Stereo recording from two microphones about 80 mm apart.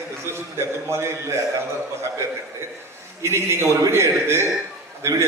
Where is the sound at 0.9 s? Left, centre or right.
Right.